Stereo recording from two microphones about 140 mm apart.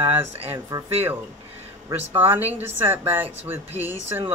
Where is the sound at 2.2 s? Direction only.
15° right (ahead or behind).